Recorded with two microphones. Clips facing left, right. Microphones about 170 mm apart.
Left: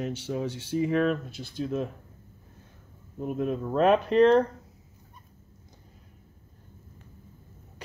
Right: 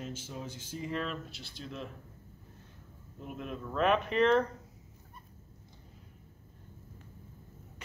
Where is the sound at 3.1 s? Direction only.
45° left (ahead or behind).